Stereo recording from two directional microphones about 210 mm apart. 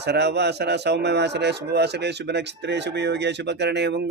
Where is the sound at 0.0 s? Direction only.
55° right (ahead or behind).